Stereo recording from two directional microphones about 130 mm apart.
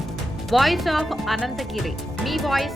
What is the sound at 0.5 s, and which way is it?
Speech, centre (ahead or behind).